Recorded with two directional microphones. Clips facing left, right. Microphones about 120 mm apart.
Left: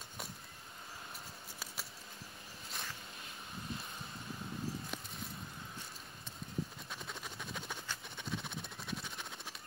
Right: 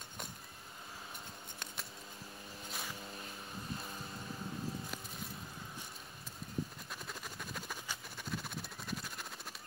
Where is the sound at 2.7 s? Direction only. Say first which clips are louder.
Right 1 dB; 5° right (ahead or behind).